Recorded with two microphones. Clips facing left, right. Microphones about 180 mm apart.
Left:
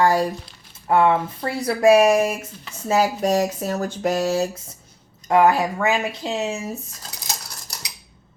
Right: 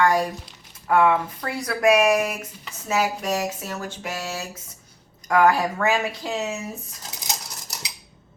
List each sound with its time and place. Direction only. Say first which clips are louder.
0.0 s speech: left 2 dB; 30° left (ahead or behind)
5.3 s speech: left 2 dB; 20° left (ahead or behind)
7.0 s a sound: even; 20° right (ahead or behind)